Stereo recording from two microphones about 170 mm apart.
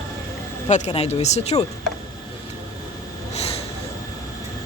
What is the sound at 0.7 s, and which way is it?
Speech, 40° left (ahead or behind).